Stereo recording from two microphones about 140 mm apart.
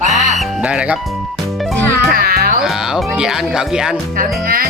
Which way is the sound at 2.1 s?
90° right.